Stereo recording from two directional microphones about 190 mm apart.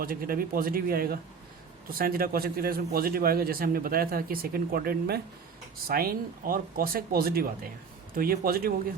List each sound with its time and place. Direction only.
0.0 s a man's voice: 50° right (ahead or behind)